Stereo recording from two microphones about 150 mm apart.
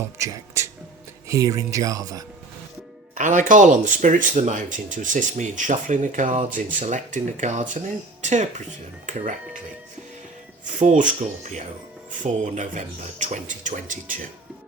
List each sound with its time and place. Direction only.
0.2 s music: 20° right (ahead or behind)
1.3 s speech: 20° right (ahead or behind)
3.2 s speech: 55° right (ahead or behind)
10.8 s speech: 55° right (ahead or behind)